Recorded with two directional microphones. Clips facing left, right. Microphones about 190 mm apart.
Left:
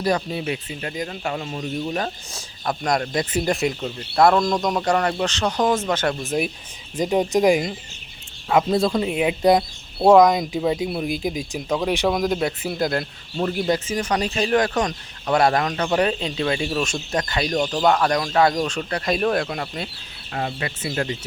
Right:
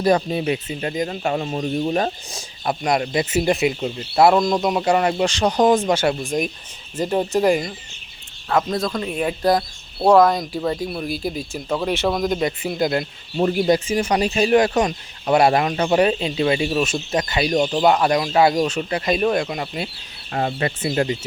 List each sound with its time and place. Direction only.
0.0 s speech: 25° right (ahead or behind)
2.3 s speech: 10° right (ahead or behind)
3.8 s speech: 15° right (ahead or behind)
4.4 s speech: 5° right (ahead or behind)
6.2 s speech: 5° left (ahead or behind)
13.3 s speech: 15° right (ahead or behind)
20.3 s speech: 35° right (ahead or behind)
20.9 s speech: 20° right (ahead or behind)